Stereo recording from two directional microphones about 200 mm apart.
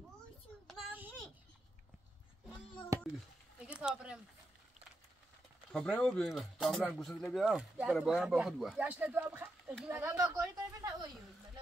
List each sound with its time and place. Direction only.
0.7 s child singing: 5° right (ahead or behind)
3.5 s a sound: 5° right (ahead or behind)
5.7 s speech: 5° left (ahead or behind); by 11.1 s 15° right (ahead or behind)